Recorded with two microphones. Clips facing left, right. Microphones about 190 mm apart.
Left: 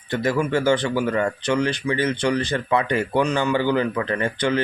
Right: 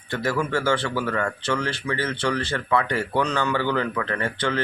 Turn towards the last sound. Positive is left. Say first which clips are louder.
# left 4 dB
turn(degrees=15)  # may be behind; listen again after turning